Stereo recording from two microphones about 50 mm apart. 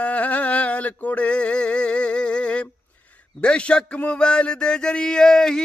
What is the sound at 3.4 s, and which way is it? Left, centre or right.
A man's voice, left.